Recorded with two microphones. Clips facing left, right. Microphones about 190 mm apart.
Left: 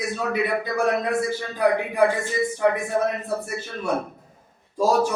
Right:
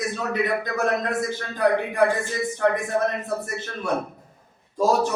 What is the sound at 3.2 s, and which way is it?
Speech, 10° left (ahead or behind).